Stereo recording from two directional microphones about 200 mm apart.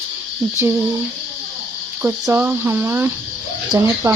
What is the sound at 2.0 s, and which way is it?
Speech, 10° right (ahead or behind).